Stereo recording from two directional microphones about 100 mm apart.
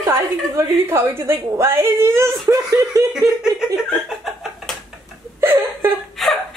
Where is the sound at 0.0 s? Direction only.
25° right (ahead or behind).